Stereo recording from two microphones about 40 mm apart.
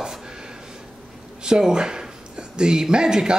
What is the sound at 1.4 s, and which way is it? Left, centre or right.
Speech, centre.